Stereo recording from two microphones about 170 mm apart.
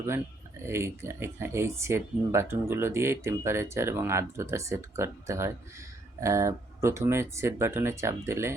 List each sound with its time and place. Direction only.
0.6 s speech: 15° right (ahead or behind)